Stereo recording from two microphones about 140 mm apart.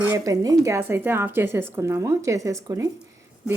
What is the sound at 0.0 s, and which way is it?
Speech, 20° right (ahead or behind).